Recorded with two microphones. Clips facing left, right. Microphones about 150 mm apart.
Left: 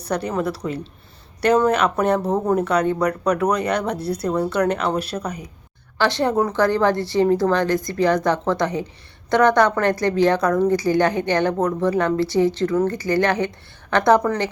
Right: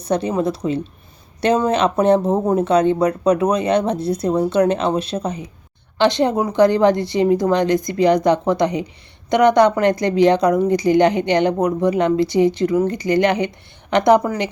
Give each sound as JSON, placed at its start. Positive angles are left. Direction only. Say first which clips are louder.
{"t": 0.0, "sound": "a woman's voice", "louder": "right 4 dB", "side_deg": -20}